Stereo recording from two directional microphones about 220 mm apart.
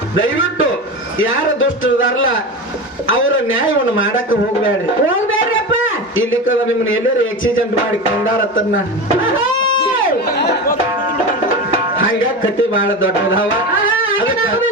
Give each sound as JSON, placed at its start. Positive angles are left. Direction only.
{"t": 0.2, "sound": "a man's voice", "side_deg": 65}
{"t": 9.2, "sound": "a sound", "side_deg": 60}
{"t": 10.2, "sound": "music", "side_deg": 45}
{"t": 12.7, "sound": "music", "side_deg": 60}